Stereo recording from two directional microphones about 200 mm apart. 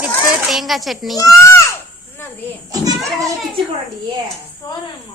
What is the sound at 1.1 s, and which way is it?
Children playing, 15° left (ahead or behind).